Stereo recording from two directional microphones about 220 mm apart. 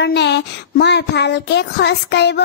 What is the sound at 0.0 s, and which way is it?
A child's voice, 50° left (ahead or behind).